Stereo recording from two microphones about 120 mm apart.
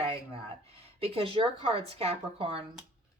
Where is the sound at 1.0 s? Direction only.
50° right (ahead or behind).